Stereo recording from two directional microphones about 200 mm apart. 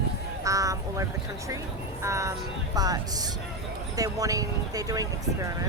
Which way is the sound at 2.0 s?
15° right (ahead or behind).